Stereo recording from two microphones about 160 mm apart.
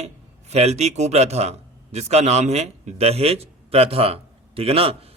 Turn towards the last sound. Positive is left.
turn(degrees=-35)  # may be behind; listen again after turning